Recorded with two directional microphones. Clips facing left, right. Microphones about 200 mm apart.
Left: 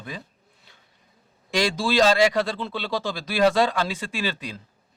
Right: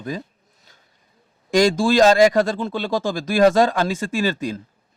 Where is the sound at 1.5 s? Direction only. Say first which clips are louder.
Right 7 dB; 45° right (ahead or behind).